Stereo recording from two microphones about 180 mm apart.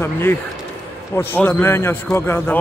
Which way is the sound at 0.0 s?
10° left (ahead or behind).